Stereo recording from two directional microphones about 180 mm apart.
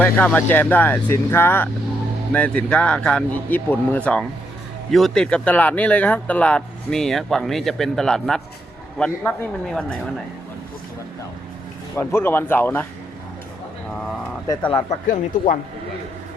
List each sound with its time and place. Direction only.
0.0 s speech: 10° left (ahead or behind)
11.9 s speech: 10° left (ahead or behind)
14.8 s speech: 45° left (ahead or behind)